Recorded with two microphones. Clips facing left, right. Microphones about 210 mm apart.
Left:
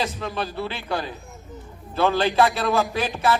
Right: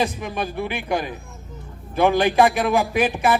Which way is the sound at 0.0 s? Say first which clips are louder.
Right 3 dB; 15° right (ahead or behind).